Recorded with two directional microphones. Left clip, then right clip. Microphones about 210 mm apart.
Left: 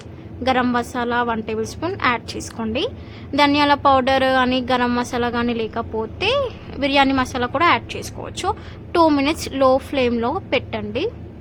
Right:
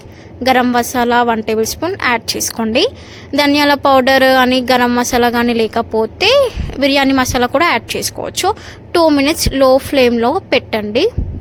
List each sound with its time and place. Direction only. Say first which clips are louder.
0.4 s speech: right 7 dB; 25° right (ahead or behind)